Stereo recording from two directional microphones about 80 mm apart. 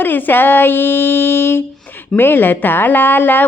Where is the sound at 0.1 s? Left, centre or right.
Left.